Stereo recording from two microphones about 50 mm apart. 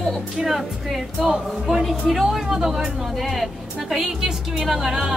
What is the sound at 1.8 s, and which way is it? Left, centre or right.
Speech, centre.